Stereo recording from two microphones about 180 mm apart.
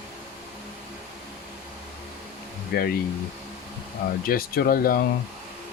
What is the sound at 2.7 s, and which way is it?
Speech, 55° left (ahead or behind).